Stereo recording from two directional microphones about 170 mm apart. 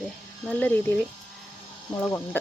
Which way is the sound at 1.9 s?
10° left (ahead or behind).